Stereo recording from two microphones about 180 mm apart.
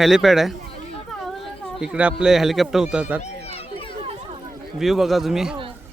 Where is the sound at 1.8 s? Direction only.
5° right (ahead or behind).